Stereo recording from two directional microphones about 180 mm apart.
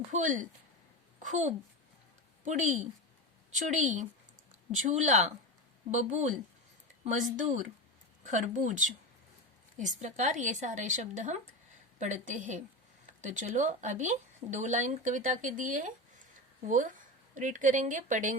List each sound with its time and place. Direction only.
0.1 s speech: 45° right (ahead or behind)